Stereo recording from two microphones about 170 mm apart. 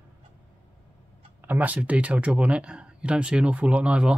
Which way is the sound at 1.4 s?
10° right (ahead or behind).